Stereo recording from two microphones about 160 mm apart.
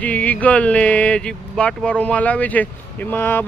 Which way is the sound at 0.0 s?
10° left (ahead or behind).